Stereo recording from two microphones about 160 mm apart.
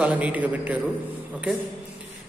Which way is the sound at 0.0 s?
10° right (ahead or behind).